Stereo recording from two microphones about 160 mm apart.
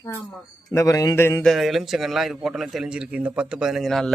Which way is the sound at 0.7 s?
20° left (ahead or behind).